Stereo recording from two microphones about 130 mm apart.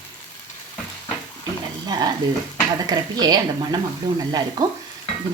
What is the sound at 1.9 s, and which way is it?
A woman's voice, 30° right (ahead or behind).